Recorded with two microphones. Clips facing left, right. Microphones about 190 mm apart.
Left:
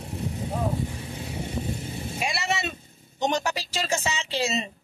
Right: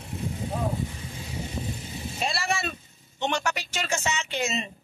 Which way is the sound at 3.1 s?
40° left (ahead or behind).